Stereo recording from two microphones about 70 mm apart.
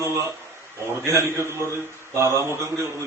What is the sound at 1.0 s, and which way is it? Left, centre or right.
A man's voice, right.